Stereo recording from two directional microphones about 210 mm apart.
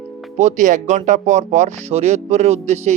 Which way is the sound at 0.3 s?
35° right (ahead or behind).